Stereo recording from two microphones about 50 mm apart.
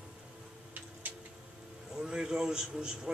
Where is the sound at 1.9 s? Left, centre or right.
Centre.